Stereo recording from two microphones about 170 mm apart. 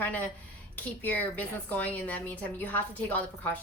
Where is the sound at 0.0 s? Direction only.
10° left (ahead or behind).